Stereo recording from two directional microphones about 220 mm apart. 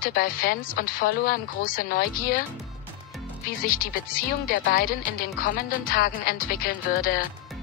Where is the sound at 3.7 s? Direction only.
40° left (ahead or behind).